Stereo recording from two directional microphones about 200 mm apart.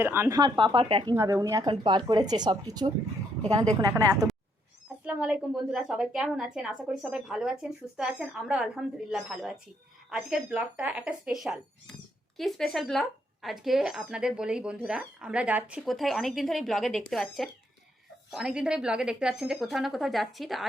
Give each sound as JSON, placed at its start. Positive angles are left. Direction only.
{"t": 0.0, "sound": "speech", "side_deg": -10}
{"t": 1.1, "sound": "speech", "side_deg": -15}
{"t": 5.0, "sound": "speech", "side_deg": -5}